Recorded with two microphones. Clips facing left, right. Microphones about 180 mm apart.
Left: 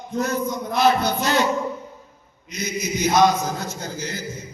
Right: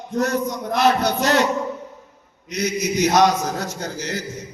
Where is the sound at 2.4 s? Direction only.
75° right (ahead or behind).